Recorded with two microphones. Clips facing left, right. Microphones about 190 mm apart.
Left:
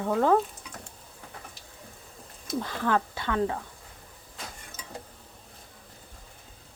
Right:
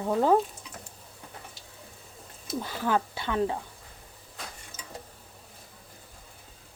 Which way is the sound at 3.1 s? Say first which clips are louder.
Even; 20° right (ahead or behind).